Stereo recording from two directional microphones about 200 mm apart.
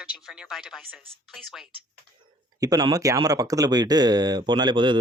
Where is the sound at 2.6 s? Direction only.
20° right (ahead or behind).